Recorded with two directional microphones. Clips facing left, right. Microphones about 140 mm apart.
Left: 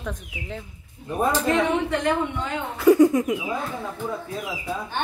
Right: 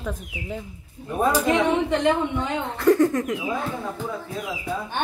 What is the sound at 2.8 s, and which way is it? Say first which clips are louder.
Speech: left 3 dB; 10° left (ahead or behind).